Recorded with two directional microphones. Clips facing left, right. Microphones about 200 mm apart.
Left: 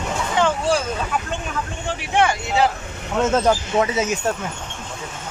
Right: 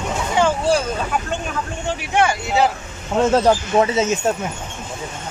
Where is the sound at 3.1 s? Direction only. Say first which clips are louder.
Right 3 dB; 35° right (ahead or behind).